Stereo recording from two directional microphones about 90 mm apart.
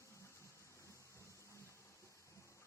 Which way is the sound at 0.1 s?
35° left (ahead or behind).